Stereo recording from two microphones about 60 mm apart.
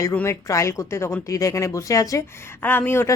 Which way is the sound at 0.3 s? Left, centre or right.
Left.